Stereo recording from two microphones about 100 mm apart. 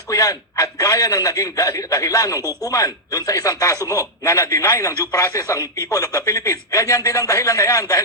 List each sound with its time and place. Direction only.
0.1 s a man's voice: 35° left (ahead or behind)